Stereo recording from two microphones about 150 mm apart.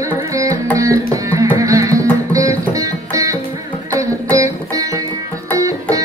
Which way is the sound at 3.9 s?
20° right (ahead or behind).